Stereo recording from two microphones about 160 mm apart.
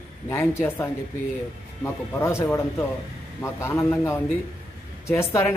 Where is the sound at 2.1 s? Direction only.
15° left (ahead or behind).